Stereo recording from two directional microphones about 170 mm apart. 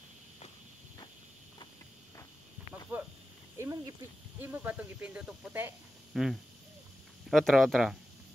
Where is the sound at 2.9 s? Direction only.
10° right (ahead or behind).